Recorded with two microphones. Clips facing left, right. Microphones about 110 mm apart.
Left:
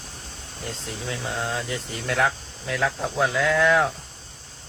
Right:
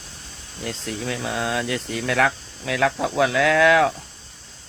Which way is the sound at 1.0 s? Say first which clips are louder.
Right 3 dB; 90° right.